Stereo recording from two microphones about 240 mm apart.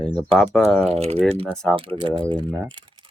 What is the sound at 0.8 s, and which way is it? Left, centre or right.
Speech, right.